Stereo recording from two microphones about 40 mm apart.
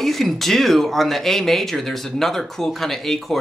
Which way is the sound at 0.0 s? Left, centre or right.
Centre.